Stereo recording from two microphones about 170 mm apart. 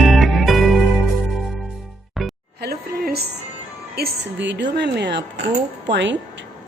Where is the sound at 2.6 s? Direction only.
65° right (ahead or behind).